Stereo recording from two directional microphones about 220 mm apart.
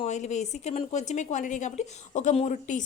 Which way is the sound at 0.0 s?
30° left (ahead or behind).